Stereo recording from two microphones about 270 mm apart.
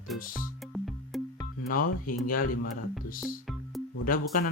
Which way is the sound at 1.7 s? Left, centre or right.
Left.